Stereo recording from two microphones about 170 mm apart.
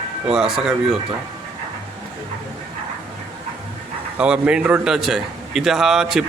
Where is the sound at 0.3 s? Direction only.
Centre (ahead or behind).